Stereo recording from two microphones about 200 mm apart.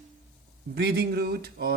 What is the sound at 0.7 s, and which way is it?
Speech, 50° right (ahead or behind).